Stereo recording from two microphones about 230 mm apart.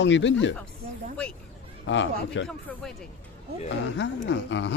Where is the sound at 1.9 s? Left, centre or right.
Left.